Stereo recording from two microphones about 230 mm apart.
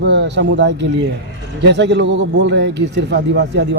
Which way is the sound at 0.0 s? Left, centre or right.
Right.